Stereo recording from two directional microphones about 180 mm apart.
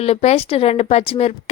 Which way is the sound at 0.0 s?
35° left (ahead or behind).